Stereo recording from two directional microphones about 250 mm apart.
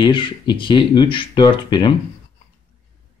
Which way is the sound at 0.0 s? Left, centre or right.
Centre.